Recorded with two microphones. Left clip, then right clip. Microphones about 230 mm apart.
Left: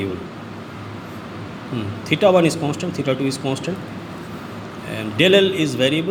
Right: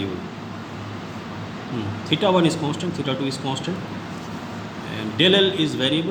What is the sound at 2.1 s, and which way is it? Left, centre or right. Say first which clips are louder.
A man's voice: left 4 dB; left.